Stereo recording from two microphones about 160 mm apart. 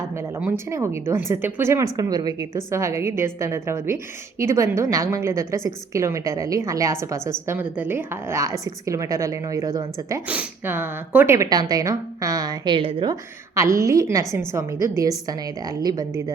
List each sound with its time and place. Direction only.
0.4 s a woman's voice: 15° right (ahead or behind)
13.6 s a woman's voice: 20° right (ahead or behind)